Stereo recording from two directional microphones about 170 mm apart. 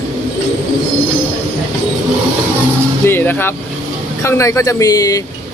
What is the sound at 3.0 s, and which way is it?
Speech, 10° left (ahead or behind).